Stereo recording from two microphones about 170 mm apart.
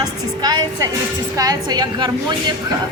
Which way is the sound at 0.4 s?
25° right (ahead or behind).